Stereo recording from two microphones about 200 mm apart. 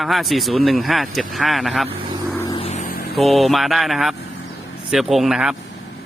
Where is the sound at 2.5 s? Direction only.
30° left (ahead or behind).